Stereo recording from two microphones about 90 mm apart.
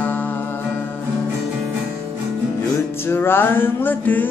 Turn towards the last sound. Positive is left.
turn(degrees=20)  # may be behind; listen again after turning